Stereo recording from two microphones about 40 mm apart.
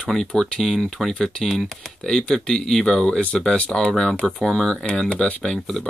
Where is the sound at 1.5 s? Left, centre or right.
Centre.